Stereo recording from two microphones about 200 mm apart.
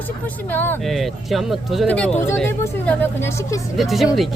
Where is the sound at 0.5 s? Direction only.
10° left (ahead or behind).